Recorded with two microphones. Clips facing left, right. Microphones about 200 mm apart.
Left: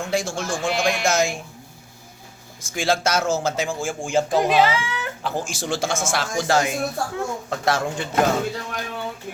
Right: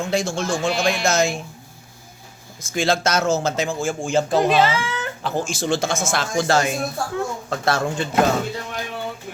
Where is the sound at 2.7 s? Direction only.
10° left (ahead or behind).